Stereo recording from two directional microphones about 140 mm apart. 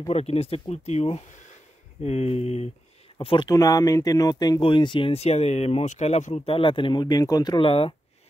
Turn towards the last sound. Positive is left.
turn(degrees=40)  # may be behind; listen again after turning